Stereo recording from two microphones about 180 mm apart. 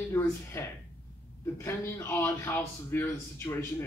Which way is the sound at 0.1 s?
15° left (ahead or behind).